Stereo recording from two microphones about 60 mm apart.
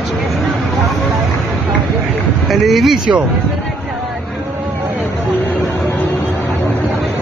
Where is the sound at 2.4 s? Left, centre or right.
Centre.